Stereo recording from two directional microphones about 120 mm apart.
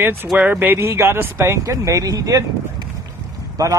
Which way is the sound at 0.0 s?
20° right (ahead or behind).